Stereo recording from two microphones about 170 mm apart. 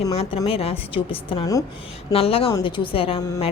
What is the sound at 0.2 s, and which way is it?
A woman's voice, 35° left (ahead or behind).